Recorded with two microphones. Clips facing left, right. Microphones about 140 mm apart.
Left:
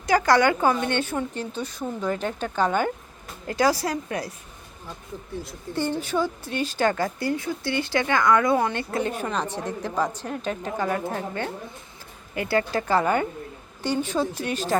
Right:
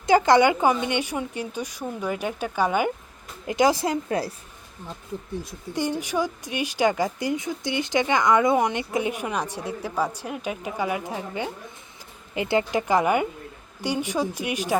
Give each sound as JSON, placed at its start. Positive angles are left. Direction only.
{"t": 0.0, "sound": "a woman's voice", "side_deg": -25}
{"t": 5.4, "sound": "speech", "side_deg": -15}